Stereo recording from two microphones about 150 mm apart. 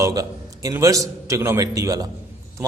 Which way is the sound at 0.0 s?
25° right (ahead or behind).